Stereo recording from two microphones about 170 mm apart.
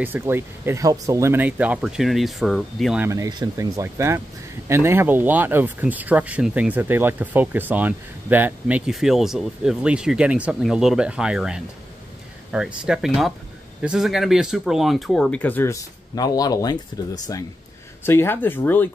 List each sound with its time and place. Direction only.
0.0 s speech: 10° right (ahead or behind)
3.0 s speech: 20° right (ahead or behind); by 18.9 s 10° left (ahead or behind)